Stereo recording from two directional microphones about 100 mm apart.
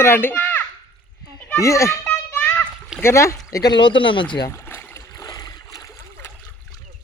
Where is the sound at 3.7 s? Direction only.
55° left (ahead or behind).